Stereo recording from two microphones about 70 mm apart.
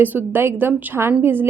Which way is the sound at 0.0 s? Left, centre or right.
Right.